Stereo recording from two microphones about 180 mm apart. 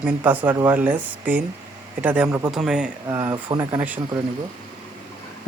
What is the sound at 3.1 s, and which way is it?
Speech, 15° right (ahead or behind).